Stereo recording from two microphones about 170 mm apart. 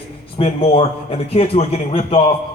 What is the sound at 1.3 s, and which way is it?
Speech, 35° left (ahead or behind).